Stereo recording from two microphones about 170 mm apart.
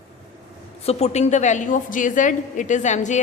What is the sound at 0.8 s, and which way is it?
A woman's voice, 40° left (ahead or behind).